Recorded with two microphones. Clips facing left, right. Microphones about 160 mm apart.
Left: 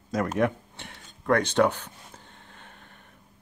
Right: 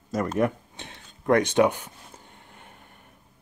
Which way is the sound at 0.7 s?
20° right (ahead or behind).